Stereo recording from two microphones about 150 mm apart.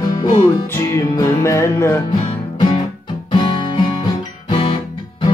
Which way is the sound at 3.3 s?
30° left (ahead or behind).